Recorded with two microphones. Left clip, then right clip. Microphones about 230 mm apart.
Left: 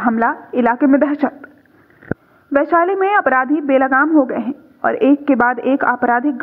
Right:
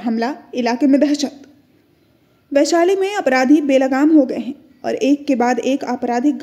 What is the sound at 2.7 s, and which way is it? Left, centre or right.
Speech, centre.